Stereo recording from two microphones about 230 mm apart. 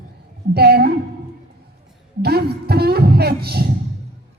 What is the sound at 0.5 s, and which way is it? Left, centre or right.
Speech, right.